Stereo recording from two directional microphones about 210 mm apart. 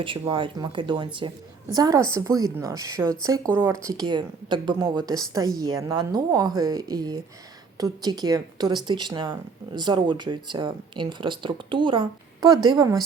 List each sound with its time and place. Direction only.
0.0 s a woman's voice: 25° right (ahead or behind)